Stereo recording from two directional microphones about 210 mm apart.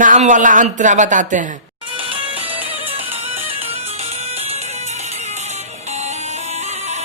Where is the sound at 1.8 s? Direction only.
25° right (ahead or behind).